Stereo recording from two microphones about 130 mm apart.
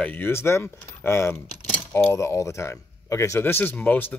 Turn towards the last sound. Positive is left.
turn(degrees=15)  # may be behind; listen again after turning